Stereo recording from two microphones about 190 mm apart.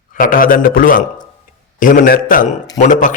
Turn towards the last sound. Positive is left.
turn(degrees=40)  # may be behind; listen again after turning